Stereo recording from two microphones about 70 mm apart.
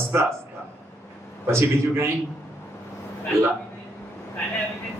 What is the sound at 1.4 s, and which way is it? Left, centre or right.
Speech, right.